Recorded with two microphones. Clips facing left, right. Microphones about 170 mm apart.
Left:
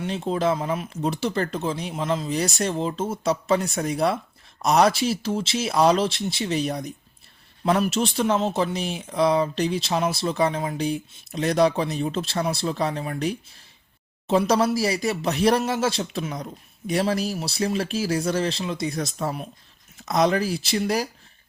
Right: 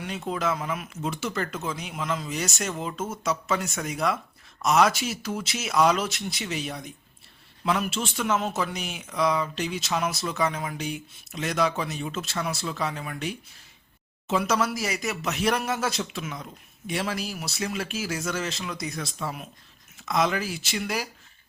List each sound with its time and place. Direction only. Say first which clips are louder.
0.0 s speech: left 5 dB; 30° left (ahead or behind)